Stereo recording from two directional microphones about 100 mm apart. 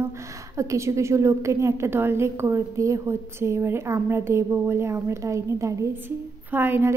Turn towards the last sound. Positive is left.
turn(degrees=-20)  # may be behind; listen again after turning